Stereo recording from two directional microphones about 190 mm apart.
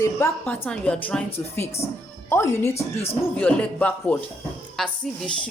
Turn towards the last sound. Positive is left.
turn(degrees=5)  # may be behind; listen again after turning